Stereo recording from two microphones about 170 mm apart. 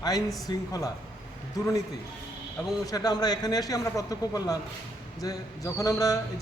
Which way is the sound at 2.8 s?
20° left (ahead or behind).